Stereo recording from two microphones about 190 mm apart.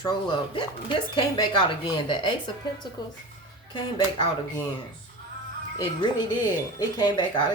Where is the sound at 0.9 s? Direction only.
25° left (ahead or behind).